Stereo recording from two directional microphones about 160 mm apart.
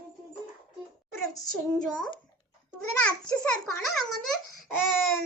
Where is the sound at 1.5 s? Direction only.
5° left (ahead or behind).